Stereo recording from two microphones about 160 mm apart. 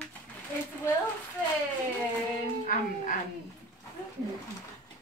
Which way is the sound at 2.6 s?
55° left (ahead or behind).